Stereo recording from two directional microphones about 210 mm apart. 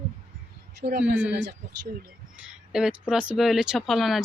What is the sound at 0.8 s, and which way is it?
Speech, 50° right (ahead or behind).